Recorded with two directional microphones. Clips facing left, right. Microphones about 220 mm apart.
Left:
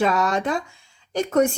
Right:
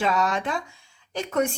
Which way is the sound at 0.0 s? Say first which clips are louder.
Left 3 dB; 40° left (ahead or behind).